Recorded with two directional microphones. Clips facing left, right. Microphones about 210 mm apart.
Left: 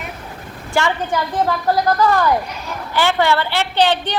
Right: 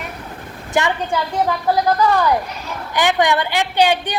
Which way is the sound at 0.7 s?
20° right (ahead or behind).